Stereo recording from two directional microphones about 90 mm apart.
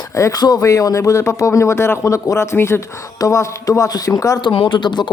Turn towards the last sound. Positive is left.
turn(degrees=55)  # may be behind; listen again after turning